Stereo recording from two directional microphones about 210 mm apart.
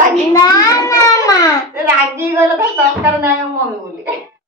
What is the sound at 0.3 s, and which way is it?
Child singing, 20° left (ahead or behind).